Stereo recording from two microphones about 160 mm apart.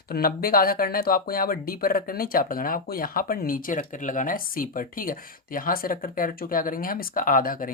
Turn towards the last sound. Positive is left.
turn(degrees=60)  # may be behind; listen again after turning